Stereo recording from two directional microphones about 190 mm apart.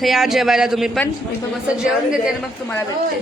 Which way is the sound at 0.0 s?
Centre (ahead or behind).